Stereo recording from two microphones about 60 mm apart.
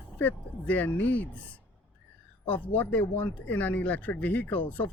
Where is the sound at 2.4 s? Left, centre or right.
Left.